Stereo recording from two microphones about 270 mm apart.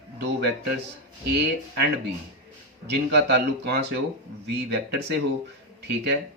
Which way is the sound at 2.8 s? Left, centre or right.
Right.